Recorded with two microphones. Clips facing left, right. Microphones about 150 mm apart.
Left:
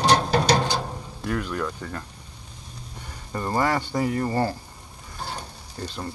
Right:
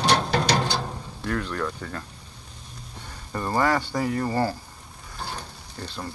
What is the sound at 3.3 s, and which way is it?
Speech, 20° left (ahead or behind).